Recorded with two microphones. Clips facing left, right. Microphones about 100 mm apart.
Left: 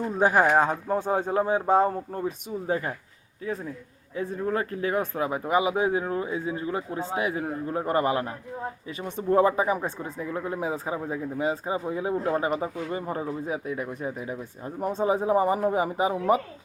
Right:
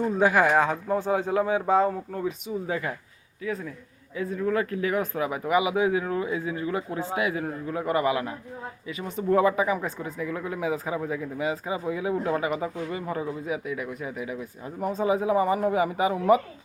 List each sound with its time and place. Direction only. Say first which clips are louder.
0.2 s speech: left 1 dB; 40° left (ahead or behind)